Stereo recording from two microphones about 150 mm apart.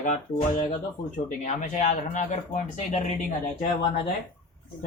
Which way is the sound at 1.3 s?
60° left (ahead or behind).